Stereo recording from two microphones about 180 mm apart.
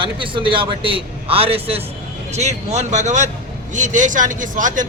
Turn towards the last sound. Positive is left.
turn(degrees=-45)  # may be behind; listen again after turning